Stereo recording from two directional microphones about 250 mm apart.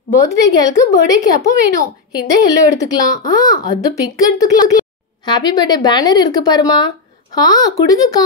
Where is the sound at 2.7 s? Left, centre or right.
Centre.